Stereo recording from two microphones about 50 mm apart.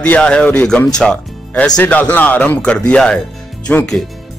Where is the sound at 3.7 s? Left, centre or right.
Left.